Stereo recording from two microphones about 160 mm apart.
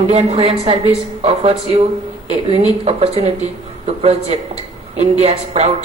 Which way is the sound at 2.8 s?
40° right (ahead or behind).